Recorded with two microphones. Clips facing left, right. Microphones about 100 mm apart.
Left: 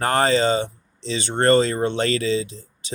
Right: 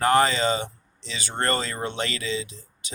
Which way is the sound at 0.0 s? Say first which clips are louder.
Left 2 dB; 35° left (ahead or behind).